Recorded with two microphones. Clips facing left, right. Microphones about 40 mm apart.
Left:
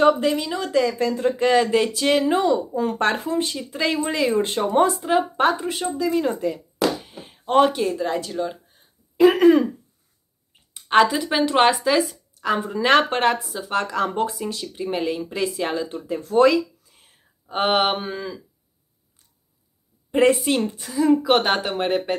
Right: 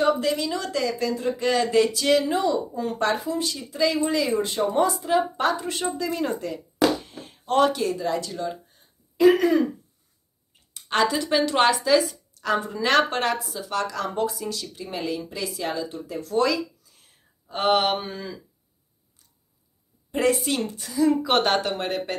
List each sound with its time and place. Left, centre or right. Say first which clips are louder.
0.2 s speech: left 3 dB; left
0.9 s speech: left 4 dB; left
1.4 s speech: left 2 dB; left
5.6 s speech: left 3 dB; centre
7.0 s a sound: even; centre
7.4 s speech: left 3 dB; left
9.1 s throat clearing: left 1 dB; left
9.4 s speech: left 6 dB; left
10.7 s speech: left 6 dB; left
20.1 s a woman's voice: left 5 dB; left